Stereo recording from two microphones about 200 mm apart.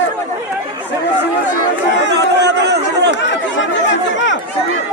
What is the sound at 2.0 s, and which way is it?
Chatter, 60° right (ahead or behind).